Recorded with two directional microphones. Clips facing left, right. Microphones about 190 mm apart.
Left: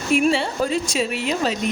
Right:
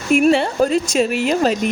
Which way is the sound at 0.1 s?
55° right (ahead or behind).